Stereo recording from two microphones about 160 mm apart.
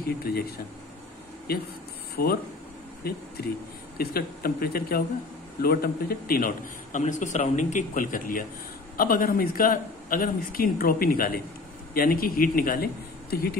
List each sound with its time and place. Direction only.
0.2 s speech: 75° left (ahead or behind)
3.0 s a man's voice: 75° left (ahead or behind)